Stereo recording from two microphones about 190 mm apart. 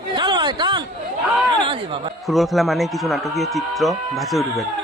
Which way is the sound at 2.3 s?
Centre (ahead or behind).